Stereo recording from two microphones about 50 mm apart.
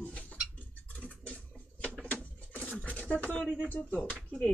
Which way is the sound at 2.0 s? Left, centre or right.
Left.